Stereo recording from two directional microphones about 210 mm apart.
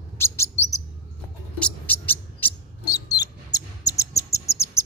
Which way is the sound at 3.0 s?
15° left (ahead or behind).